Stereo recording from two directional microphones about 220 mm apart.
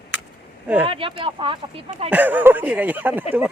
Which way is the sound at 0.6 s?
10° right (ahead or behind).